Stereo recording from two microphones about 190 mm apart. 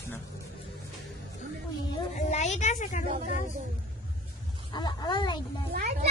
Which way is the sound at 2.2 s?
35° left (ahead or behind).